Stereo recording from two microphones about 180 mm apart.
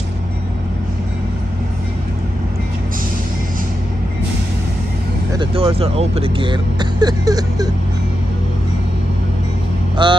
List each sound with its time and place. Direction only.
5.4 s speech: 30° right (ahead or behind)
10.0 s speech: 25° right (ahead or behind)